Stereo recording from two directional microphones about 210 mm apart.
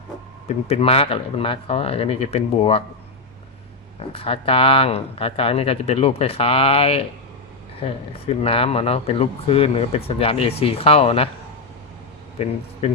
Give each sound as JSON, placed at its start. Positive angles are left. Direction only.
{"t": 0.4, "sound": "speech", "side_deg": 30}
{"t": 4.1, "sound": "speech", "side_deg": 25}
{"t": 12.4, "sound": "speech", "side_deg": 30}